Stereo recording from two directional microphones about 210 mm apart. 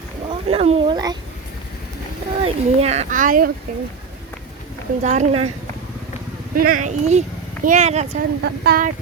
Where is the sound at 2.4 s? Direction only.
30° right (ahead or behind).